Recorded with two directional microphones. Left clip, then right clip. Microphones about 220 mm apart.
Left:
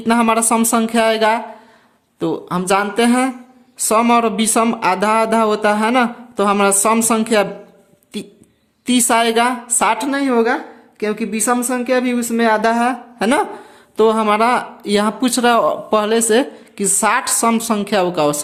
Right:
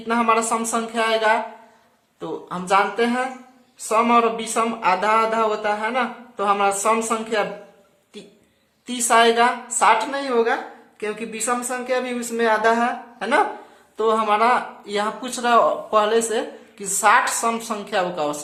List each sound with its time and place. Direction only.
0.1 s speech: 50° left (ahead or behind)
8.9 s speech: 45° left (ahead or behind)